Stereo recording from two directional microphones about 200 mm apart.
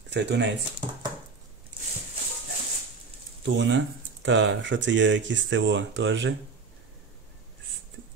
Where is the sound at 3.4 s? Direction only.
65° right (ahead or behind).